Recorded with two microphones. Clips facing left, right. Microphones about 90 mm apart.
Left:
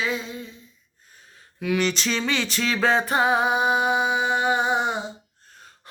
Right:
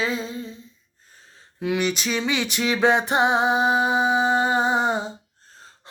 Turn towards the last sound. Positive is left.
turn(degrees=-35)  # may be behind; listen again after turning